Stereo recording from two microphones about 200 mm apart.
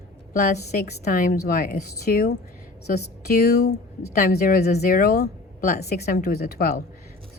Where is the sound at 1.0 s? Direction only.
45° left (ahead or behind).